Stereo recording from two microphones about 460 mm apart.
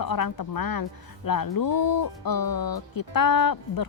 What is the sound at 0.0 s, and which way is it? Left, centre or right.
A woman's voice, left.